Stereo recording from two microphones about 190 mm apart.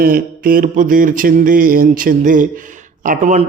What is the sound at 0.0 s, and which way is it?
Mantra, 50° right (ahead or behind).